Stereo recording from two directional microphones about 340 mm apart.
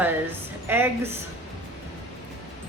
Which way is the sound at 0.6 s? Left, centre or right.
Centre.